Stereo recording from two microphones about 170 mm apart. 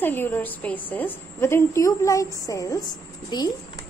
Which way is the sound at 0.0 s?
10° left (ahead or behind).